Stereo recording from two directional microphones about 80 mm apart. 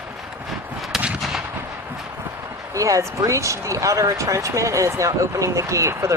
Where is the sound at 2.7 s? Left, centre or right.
Right.